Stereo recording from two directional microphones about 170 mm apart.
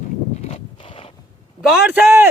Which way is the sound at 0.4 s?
35° left (ahead or behind).